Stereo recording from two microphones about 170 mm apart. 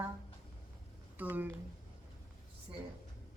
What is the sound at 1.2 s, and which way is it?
Speech, 10° right (ahead or behind).